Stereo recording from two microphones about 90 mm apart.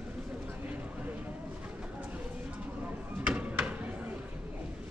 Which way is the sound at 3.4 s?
15° right (ahead or behind).